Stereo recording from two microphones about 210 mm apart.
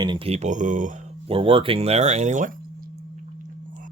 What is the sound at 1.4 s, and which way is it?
Speech, 25° right (ahead or behind).